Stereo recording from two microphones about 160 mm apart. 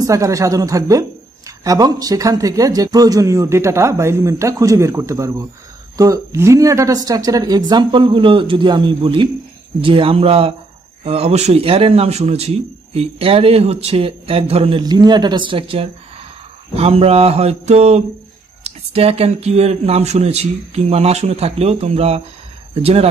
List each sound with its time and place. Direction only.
0.0 s a man's voice: 20° right (ahead or behind); by 23.0 s 40° right (ahead or behind)